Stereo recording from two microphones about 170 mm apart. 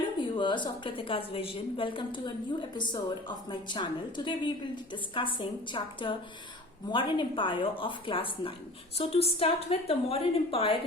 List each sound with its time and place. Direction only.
0.2 s a woman's voice: 30° left (ahead or behind)